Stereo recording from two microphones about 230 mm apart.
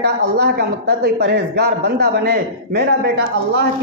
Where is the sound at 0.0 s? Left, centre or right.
Right.